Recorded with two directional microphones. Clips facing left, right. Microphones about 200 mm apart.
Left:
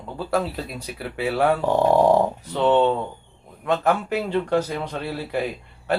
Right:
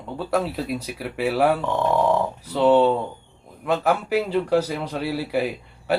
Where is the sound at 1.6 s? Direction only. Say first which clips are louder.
Left 4 dB; 35° left (ahead or behind).